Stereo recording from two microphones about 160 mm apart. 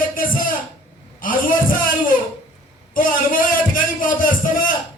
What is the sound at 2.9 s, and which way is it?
A man's voice, 60° left (ahead or behind).